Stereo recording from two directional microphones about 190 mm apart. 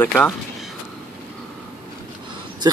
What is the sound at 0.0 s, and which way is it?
Speech, 10° left (ahead or behind).